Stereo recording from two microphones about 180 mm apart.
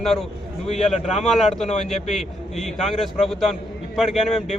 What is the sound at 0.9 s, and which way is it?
Speech, 40° left (ahead or behind).